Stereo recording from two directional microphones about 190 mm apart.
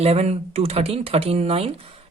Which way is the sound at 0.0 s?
35° right (ahead or behind).